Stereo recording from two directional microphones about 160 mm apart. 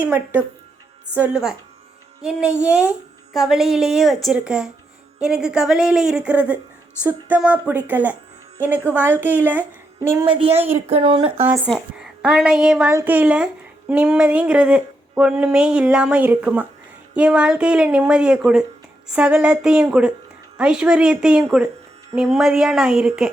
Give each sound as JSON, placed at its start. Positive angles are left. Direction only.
{"t": 0.0, "sound": "speech", "side_deg": -10}
{"t": 2.6, "sound": "speech", "side_deg": -10}
{"t": 10.2, "sound": "speech", "side_deg": -35}
{"t": 11.9, "sound": "a woman's voice", "side_deg": -5}